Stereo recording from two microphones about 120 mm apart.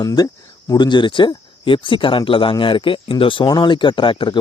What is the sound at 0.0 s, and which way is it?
Speech, 30° left (ahead or behind).